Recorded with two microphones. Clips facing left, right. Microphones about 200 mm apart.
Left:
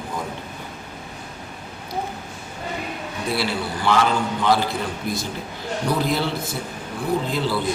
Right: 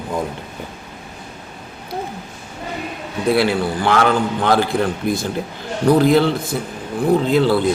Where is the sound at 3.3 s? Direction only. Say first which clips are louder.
Right 8 dB; 55° right (ahead or behind).